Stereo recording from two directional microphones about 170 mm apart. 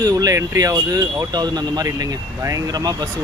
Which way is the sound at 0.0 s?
20° right (ahead or behind).